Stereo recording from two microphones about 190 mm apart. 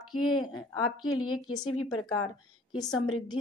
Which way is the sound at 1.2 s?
90° left.